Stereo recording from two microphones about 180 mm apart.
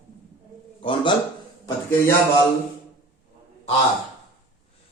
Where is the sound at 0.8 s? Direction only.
25° left (ahead or behind).